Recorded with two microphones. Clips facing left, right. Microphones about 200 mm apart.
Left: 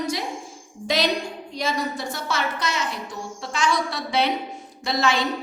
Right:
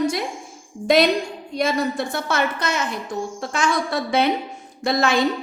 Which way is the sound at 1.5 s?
55° right (ahead or behind).